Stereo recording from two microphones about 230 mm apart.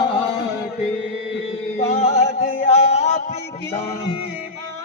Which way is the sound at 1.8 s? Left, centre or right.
Left.